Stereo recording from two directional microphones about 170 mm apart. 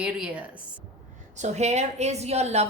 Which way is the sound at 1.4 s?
40° right (ahead or behind).